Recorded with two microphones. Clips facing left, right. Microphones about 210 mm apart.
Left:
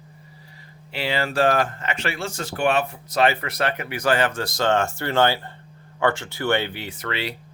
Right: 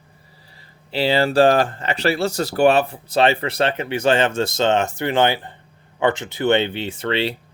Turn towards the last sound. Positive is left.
turn(degrees=-25)  # may be behind; listen again after turning